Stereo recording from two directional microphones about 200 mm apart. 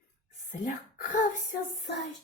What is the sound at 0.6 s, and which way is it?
Speech, 40° left (ahead or behind).